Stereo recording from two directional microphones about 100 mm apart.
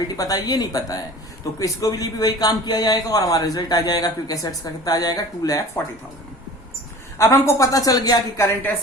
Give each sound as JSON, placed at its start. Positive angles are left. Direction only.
{"t": 0.1, "sound": "speech", "side_deg": 40}
{"t": 7.2, "sound": "speech", "side_deg": 35}